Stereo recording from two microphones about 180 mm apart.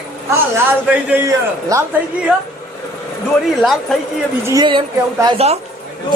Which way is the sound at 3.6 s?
Centre (ahead or behind).